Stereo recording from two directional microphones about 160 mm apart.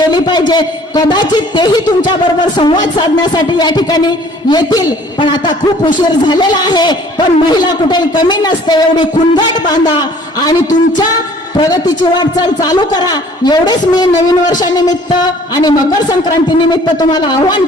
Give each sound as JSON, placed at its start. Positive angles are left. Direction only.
{"t": 0.1, "sound": "a man's voice", "side_deg": 25}
{"t": 10.4, "sound": "a man's voice", "side_deg": 25}